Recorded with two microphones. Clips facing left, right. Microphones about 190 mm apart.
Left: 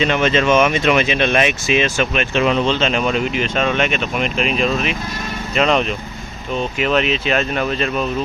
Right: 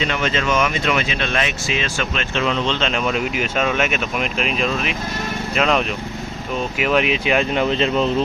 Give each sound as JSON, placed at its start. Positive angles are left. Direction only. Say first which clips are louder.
{"t": 0.1, "sound": "speech", "louder": "left 6 dB", "side_deg": 20}